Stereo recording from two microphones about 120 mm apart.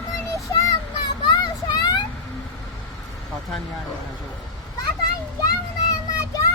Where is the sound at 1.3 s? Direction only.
35° left (ahead or behind).